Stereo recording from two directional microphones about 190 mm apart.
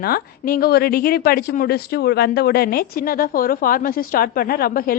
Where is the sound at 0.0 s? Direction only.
50° left (ahead or behind).